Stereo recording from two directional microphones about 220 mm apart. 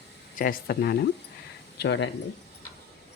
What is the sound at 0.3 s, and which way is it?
Speech, 40° left (ahead or behind).